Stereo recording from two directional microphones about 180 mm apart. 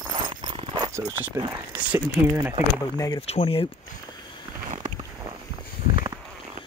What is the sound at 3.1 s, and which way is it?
Speech, 35° left (ahead or behind).